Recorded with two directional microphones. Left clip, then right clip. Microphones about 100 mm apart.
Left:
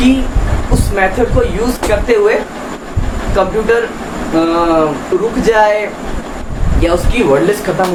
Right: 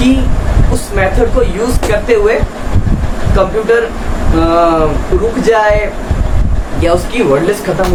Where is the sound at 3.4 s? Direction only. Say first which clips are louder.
Right 1 dB; 5° left (ahead or behind).